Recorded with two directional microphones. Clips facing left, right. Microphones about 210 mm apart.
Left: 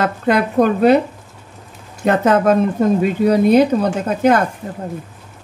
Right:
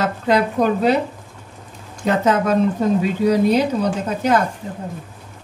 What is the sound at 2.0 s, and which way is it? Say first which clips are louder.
Speech: left 4 dB; 55° left (ahead or behind).